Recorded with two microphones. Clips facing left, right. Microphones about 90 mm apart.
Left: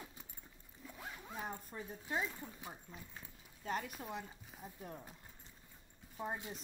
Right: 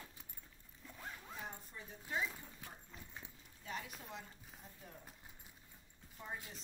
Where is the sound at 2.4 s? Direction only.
15° left (ahead or behind).